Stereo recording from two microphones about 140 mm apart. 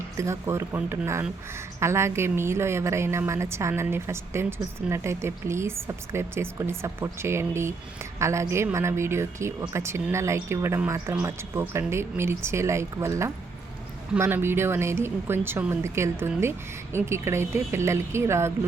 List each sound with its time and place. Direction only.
0.2 s a woman's voice: 20° right (ahead or behind)